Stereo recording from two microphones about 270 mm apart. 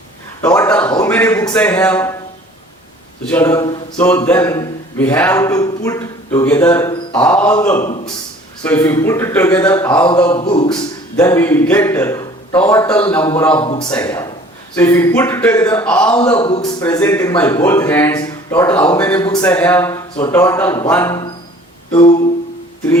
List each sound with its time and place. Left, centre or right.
0.4 s a man's voice: centre
3.2 s speech: centre
7.8 s music: left
8.6 s a man's voice: centre
10.3 s a man's voice: centre
13.6 s a man's voice: centre
16.4 s a man's voice: centre
21.9 s music: centre